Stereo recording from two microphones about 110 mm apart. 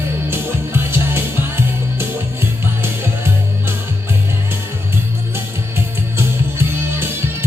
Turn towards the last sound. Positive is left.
turn(degrees=-20)  # may be behind; listen again after turning